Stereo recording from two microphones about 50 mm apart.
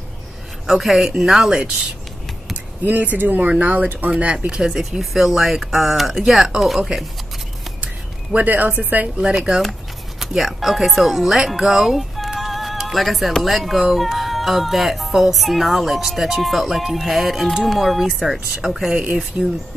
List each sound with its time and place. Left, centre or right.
0.7 s speech: centre
2.5 s speech: right
4.1 s speech: right; by 6.9 s centre
8.4 s speech: right
9.2 s speech: centre
9.6 s speech: centre